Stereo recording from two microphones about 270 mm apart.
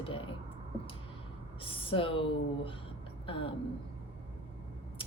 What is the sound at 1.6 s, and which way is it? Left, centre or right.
A woman's voice, centre.